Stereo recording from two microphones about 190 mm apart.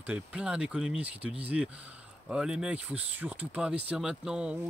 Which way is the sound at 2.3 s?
5° right (ahead or behind).